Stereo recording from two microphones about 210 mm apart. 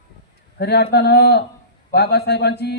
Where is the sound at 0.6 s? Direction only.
50° left (ahead or behind).